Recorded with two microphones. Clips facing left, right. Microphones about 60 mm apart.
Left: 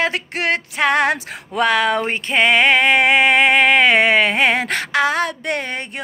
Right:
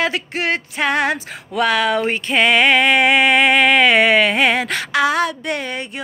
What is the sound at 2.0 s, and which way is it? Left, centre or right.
Music, left.